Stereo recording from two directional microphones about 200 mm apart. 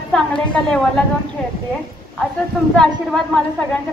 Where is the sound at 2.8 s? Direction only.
5° left (ahead or behind).